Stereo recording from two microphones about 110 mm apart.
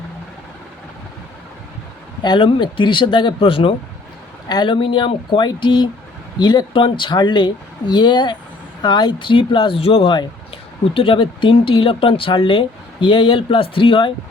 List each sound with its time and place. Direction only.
2.2 s speech: 45° left (ahead or behind)
4.4 s speech: 40° left (ahead or behind)